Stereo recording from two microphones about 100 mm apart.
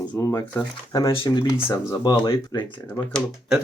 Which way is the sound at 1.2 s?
45° left (ahead or behind).